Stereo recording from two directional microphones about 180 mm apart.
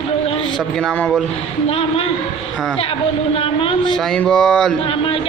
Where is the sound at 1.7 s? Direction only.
30° left (ahead or behind).